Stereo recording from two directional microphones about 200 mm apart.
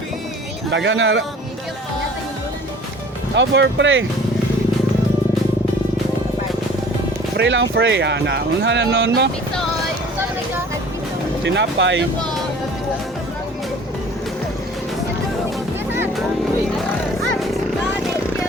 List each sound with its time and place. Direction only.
0.7 s speech: 65° right (ahead or behind)
3.3 s speech: 65° right (ahead or behind)
7.3 s speech: 65° right (ahead or behind)
11.4 s speech: 60° right (ahead or behind)